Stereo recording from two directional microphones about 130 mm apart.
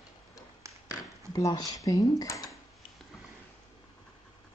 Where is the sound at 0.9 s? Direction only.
25° left (ahead or behind).